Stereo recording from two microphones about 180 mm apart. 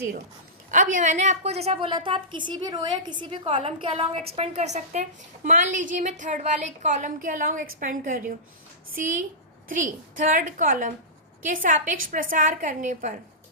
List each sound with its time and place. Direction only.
0.7 s a woman's voice: 45° right (ahead or behind)
9.6 s a woman's voice: 45° right (ahead or behind)